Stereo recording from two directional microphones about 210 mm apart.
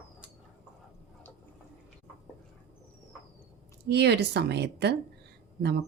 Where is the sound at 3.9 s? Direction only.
50° right (ahead or behind).